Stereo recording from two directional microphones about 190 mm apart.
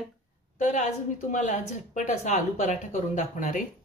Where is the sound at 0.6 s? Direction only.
40° left (ahead or behind).